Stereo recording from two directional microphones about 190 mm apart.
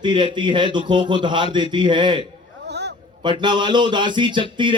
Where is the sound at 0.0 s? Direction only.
25° right (ahead or behind).